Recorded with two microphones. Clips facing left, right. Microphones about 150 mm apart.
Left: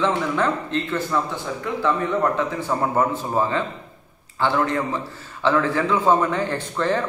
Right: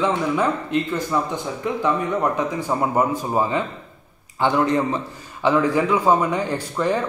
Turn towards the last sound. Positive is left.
turn(degrees=-10)  # may be behind; listen again after turning